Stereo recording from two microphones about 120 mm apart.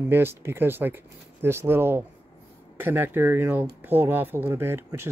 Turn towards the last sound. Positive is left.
turn(degrees=-20)  # may be behind; listen again after turning